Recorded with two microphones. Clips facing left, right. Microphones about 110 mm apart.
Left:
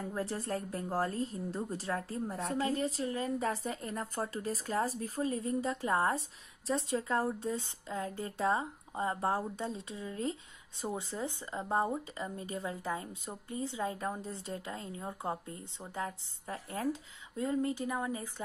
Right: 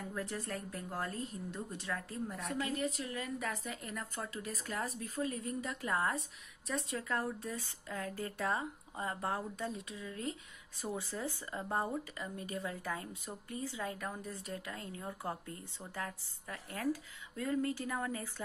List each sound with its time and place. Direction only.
0.0 s a woman's voice: 30° left (ahead or behind)